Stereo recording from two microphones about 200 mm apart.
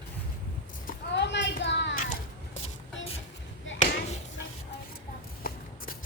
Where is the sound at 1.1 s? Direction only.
60° left (ahead or behind).